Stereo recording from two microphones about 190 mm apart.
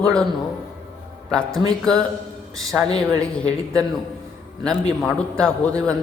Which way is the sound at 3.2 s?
5° left (ahead or behind).